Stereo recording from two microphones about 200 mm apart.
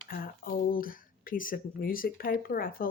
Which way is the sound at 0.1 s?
45° left (ahead or behind).